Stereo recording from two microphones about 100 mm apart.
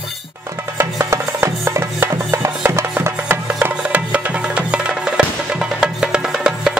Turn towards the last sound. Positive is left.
turn(degrees=-5)  # may be behind; listen again after turning